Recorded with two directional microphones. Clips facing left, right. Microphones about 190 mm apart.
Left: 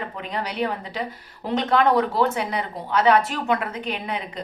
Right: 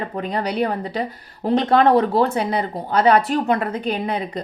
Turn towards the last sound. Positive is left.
turn(degrees=-35)  # may be behind; listen again after turning